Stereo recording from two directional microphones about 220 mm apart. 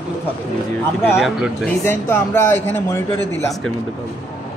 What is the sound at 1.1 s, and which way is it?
Speech, 5° right (ahead or behind).